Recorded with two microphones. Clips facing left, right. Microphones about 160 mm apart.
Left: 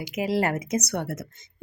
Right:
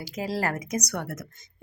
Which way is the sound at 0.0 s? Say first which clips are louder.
Left 4 dB; 20° left (ahead or behind).